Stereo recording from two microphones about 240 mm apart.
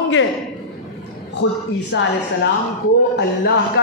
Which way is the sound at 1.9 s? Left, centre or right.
Left.